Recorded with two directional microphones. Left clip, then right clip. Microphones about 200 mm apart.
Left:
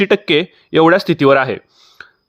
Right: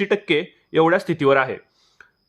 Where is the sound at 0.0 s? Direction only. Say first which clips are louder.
Left 7 dB; 35° left (ahead or behind).